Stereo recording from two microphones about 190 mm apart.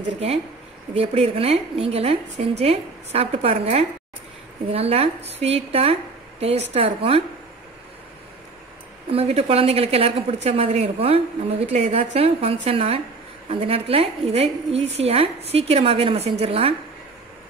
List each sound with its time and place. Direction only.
0.9 s a woman's voice: 30° right (ahead or behind)
9.1 s a woman's voice: 30° right (ahead or behind)